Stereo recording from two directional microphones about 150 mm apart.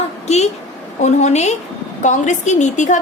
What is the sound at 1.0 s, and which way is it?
A woman's voice, 50° left (ahead or behind).